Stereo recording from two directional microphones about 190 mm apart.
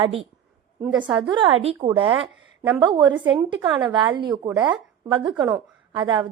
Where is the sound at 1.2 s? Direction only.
25° right (ahead or behind).